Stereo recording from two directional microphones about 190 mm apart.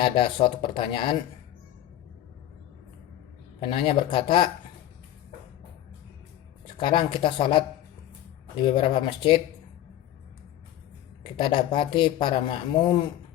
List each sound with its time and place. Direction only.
0.0 s speech: 25° left (ahead or behind)
3.6 s speech: 30° left (ahead or behind)
6.7 s speech: 25° left (ahead or behind)
8.6 s speech: 25° left (ahead or behind)
11.3 s speech: 25° left (ahead or behind)